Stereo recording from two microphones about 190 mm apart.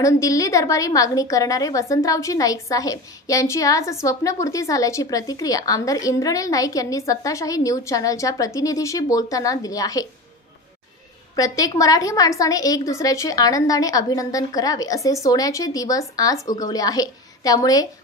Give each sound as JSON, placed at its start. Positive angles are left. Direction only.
{"t": 0.0, "sound": "a woman's voice", "side_deg": 15}
{"t": 11.3, "sound": "a woman's voice", "side_deg": 20}